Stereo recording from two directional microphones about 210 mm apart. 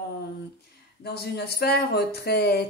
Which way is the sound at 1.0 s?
50° left (ahead or behind).